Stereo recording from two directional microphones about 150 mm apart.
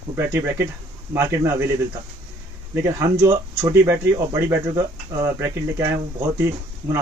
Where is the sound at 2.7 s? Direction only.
20° right (ahead or behind).